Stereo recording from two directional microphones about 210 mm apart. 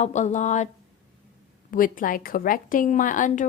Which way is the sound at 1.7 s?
40° left (ahead or behind).